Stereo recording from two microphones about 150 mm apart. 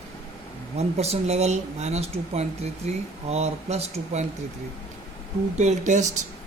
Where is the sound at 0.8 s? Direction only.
45° right (ahead or behind).